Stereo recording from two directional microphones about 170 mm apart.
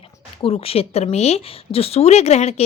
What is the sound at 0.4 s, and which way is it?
A woman's voice, 35° left (ahead or behind).